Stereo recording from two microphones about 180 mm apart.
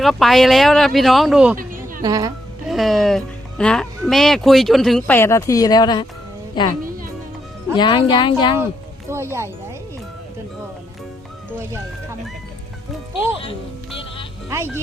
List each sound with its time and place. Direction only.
0.0 s speech: centre (ahead or behind)
2.0 s a woman's voice: 20° right (ahead or behind)
2.6 s speech: centre (ahead or behind); by 6.7 s 25° left (ahead or behind)
7.8 s speech: 25° left (ahead or behind)
9.0 s speech: 15° right (ahead or behind)